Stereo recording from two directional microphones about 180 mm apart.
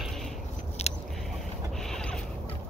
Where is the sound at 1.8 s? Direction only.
5° left (ahead or behind).